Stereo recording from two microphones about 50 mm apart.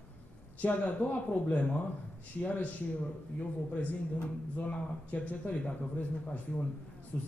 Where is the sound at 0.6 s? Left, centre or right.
Left.